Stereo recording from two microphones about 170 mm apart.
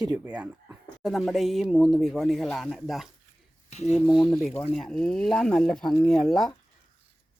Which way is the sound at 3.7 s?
40° left (ahead or behind).